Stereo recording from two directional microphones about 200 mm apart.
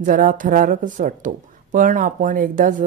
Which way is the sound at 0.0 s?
40° right (ahead or behind).